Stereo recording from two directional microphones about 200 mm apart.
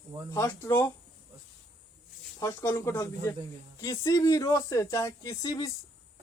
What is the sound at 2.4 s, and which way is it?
Speech, 10° left (ahead or behind).